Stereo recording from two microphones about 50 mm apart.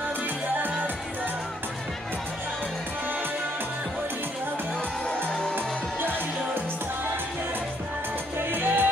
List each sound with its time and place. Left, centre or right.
5.9 s music: right
8.5 s music: right